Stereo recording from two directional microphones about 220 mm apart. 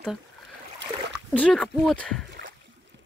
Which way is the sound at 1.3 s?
5° left (ahead or behind).